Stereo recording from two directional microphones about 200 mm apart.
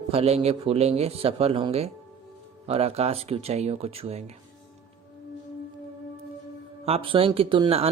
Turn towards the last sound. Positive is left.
turn(degrees=-25)  # may be behind; listen again after turning